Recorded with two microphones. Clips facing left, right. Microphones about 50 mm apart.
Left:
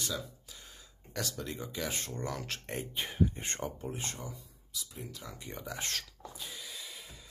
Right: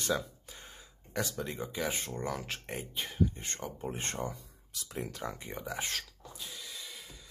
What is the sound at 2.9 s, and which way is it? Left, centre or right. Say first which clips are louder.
Speech: even; centre.